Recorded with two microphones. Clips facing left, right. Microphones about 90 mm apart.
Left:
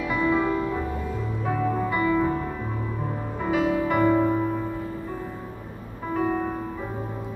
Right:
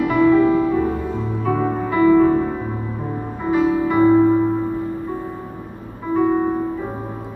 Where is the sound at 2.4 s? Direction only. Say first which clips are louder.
Right 8 dB; 35° right (ahead or behind).